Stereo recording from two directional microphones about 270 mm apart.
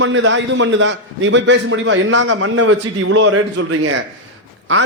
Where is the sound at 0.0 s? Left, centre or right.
Right.